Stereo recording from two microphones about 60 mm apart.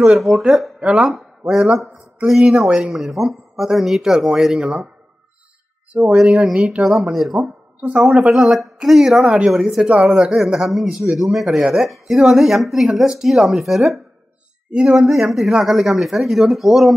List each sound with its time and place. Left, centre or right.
0.2 s a man's voice: centre
1.1 s speech: centre
5.9 s a man's voice: centre
9.8 s speech: centre
10.1 s a man's voice: centre
14.7 s speech: centre
15.0 s speech: centre